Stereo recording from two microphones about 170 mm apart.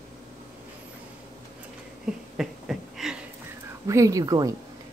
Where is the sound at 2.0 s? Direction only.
5° right (ahead or behind).